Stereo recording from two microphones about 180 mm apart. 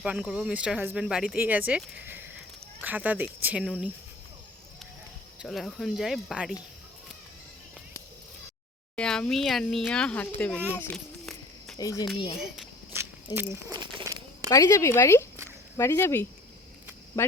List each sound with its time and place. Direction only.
0.0 s speech: 5° right (ahead or behind)
5.4 s speech: centre (ahead or behind)
9.0 s speech: 5° left (ahead or behind)
10.8 s a sound: centre (ahead or behind)
11.8 s speech: 20° left (ahead or behind)
12.9 s walk: 10° right (ahead or behind)
14.5 s speech: 15° left (ahead or behind)